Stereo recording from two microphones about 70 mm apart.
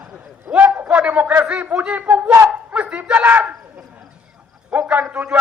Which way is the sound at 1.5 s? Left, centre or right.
Centre.